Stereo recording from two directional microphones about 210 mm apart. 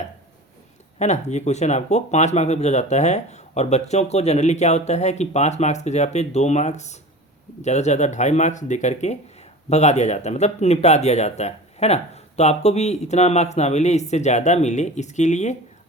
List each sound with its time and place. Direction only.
0.9 s speech: 35° left (ahead or behind)